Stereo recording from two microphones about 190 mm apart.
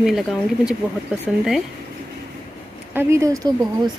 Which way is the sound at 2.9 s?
15° right (ahead or behind).